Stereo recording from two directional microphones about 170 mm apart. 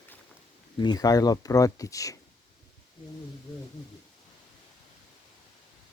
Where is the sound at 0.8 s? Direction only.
25° left (ahead or behind).